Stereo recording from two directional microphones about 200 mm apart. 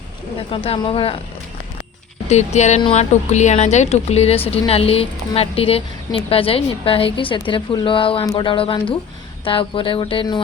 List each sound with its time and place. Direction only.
0.5 s speech: 25° left (ahead or behind)
2.2 s speech: 35° left (ahead or behind)